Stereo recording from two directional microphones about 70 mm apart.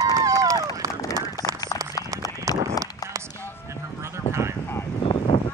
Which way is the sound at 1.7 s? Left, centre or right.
Left.